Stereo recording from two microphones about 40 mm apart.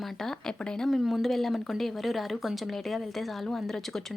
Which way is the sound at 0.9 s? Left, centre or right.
Centre.